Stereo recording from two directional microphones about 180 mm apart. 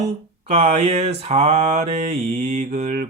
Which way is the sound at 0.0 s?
35° right (ahead or behind).